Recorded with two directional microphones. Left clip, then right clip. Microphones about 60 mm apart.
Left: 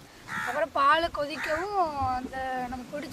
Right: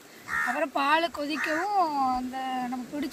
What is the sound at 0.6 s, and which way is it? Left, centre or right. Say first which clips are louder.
Speech: left 4 dB; left.